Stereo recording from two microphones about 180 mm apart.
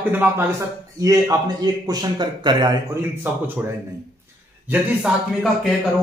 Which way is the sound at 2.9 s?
10° right (ahead or behind).